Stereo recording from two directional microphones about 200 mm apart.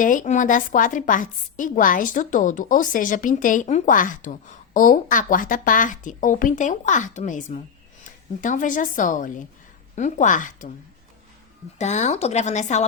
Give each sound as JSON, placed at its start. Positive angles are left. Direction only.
{"t": 0.0, "sound": "a woman's voice", "side_deg": 40}
{"t": 11.8, "sound": "a woman's voice", "side_deg": 35}